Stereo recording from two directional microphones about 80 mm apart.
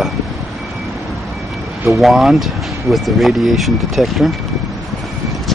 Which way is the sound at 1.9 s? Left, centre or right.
Centre.